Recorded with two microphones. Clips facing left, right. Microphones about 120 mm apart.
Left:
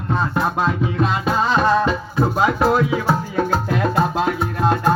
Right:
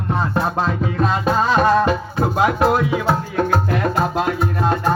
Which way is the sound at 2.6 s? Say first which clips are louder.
Even; centre (ahead or behind).